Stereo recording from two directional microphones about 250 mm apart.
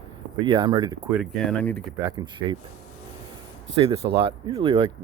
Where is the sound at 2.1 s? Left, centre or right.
Centre.